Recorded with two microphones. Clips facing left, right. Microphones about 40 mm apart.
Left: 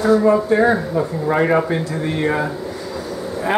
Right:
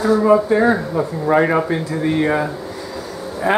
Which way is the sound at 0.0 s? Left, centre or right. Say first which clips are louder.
Even; centre.